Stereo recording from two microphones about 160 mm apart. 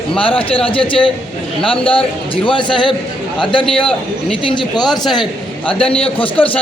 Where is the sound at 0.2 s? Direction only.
35° left (ahead or behind).